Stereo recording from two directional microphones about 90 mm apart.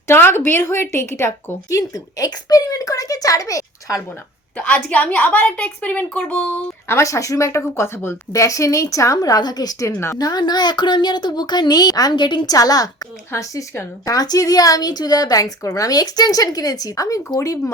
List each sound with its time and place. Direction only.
0.1 s a woman's voice: 25° left (ahead or behind)
1.8 s a woman's voice: 45° left (ahead or behind)
4.5 s a woman's voice: 15° left (ahead or behind)
6.8 s a woman's voice: 35° left (ahead or behind); by 12.5 s 55° left (ahead or behind)
12.5 s a woman's voice: 45° left (ahead or behind)